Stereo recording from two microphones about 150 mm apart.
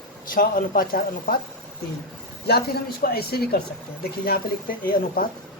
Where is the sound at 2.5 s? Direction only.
90° left.